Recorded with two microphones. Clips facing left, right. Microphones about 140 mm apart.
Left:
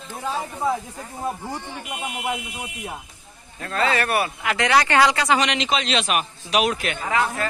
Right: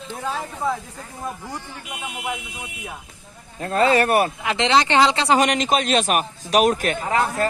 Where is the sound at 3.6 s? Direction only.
35° right (ahead or behind).